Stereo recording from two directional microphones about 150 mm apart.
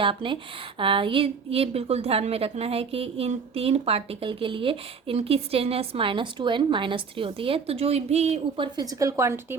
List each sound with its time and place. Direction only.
0.0 s a woman's voice: 35° right (ahead or behind); by 9.6 s 15° right (ahead or behind)